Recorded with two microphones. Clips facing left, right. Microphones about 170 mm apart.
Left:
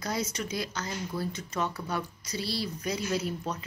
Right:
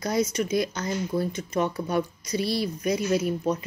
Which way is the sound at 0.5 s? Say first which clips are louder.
Right 8 dB; 20° right (ahead or behind).